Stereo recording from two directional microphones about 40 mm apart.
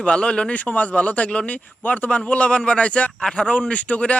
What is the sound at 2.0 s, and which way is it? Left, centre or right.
Speech, left.